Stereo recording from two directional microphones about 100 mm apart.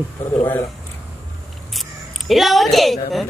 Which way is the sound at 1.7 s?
Centre (ahead or behind).